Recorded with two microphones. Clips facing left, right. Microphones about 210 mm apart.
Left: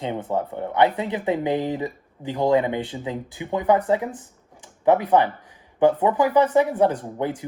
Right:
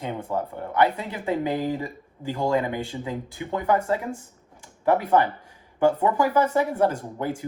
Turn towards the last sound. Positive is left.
turn(degrees=20)  # may be behind; listen again after turning